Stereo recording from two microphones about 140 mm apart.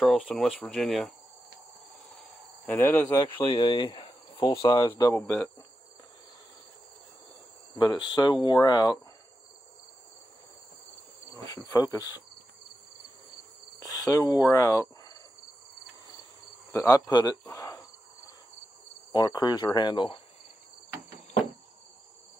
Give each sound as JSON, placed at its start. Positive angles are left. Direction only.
{"t": 0.0, "sound": "speech", "side_deg": 5}
{"t": 2.6, "sound": "speech", "side_deg": 15}
{"t": 3.4, "sound": "speech", "side_deg": 40}
{"t": 7.7, "sound": "speech", "side_deg": 30}
{"t": 11.4, "sound": "speech", "side_deg": 25}
{"t": 13.7, "sound": "cricket", "side_deg": 25}
{"t": 16.7, "sound": "speech", "side_deg": 25}
{"t": 17.5, "sound": "cricket", "side_deg": 25}
{"t": 19.1, "sound": "speech", "side_deg": 30}